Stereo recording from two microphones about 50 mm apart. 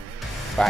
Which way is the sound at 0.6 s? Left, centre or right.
Centre.